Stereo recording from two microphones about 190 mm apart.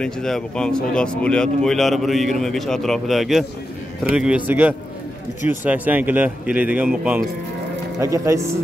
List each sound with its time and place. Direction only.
0.0 s a man's voice: 5° left (ahead or behind)
8.0 s speech: 15° right (ahead or behind)